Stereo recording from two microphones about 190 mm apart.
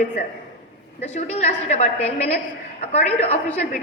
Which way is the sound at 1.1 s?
35° left (ahead or behind).